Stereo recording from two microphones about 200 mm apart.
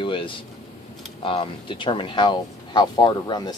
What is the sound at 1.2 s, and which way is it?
Speech, 25° left (ahead or behind).